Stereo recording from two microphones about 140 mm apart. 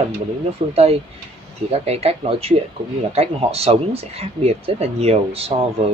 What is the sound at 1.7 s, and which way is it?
Speech, 50° right (ahead or behind).